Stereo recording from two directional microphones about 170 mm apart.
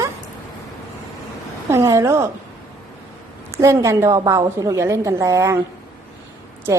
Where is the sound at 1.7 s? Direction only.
20° right (ahead or behind).